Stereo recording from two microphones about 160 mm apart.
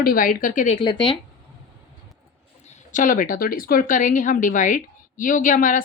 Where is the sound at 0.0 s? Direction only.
65° left (ahead or behind).